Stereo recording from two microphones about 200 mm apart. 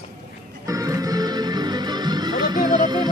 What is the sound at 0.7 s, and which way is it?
Music, 15° right (ahead or behind).